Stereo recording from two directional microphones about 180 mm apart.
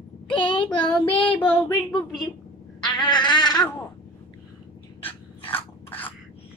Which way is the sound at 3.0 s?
25° left (ahead or behind).